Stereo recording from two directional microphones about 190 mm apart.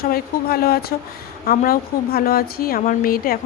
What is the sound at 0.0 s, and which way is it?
A woman's voice, 55° left (ahead or behind).